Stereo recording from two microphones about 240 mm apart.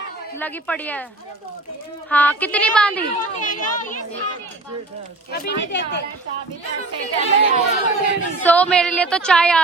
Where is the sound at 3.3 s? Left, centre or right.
Left.